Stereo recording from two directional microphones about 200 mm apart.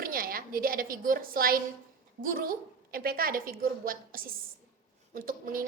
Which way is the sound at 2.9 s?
45° right (ahead or behind).